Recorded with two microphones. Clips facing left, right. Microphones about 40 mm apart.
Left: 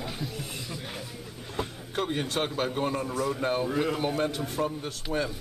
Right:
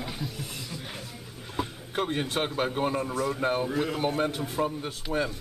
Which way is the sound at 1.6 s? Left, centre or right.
Centre.